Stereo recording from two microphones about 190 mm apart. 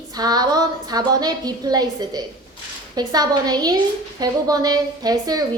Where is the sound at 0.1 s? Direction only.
20° right (ahead or behind).